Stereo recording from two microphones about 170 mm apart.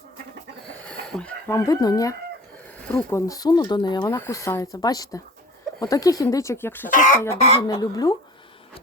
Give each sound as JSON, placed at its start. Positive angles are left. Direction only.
{"t": 0.9, "sound": "speech", "side_deg": 5}
{"t": 2.8, "sound": "speech", "side_deg": 10}
{"t": 6.9, "sound": "speech", "side_deg": 45}
{"t": 7.7, "sound": "speech", "side_deg": 20}